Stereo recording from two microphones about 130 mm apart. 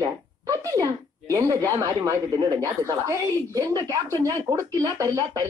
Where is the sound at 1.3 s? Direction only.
25° right (ahead or behind).